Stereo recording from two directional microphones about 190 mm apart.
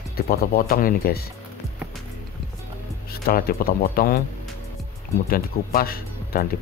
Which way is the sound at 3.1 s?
55° left (ahead or behind).